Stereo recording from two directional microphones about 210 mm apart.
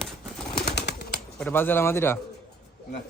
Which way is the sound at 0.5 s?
50° left (ahead or behind).